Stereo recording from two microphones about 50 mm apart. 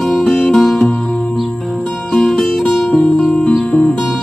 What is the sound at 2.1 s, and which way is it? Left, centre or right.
Music, centre.